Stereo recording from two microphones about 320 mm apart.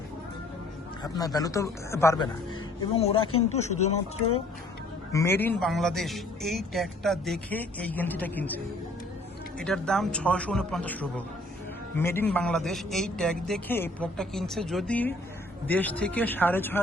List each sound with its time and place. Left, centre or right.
1.0 s speech: centre
5.1 s speech: centre